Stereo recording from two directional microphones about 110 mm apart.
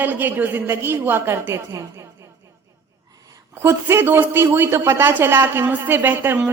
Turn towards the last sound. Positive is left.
turn(degrees=-20)  # may be behind; listen again after turning